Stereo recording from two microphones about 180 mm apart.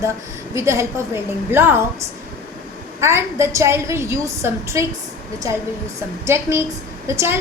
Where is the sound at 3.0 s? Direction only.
15° right (ahead or behind).